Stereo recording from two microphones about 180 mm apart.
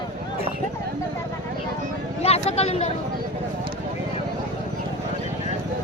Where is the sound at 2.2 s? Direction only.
35° left (ahead or behind).